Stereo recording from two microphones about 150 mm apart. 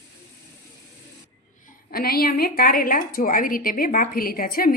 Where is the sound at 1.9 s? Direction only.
85° left.